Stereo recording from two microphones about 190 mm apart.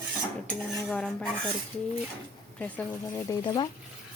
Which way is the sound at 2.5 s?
10° left (ahead or behind).